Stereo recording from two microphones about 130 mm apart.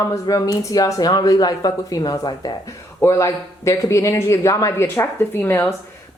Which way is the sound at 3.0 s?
20° left (ahead or behind).